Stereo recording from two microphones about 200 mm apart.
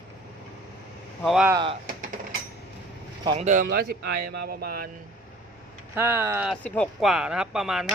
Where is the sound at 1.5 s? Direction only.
20° right (ahead or behind).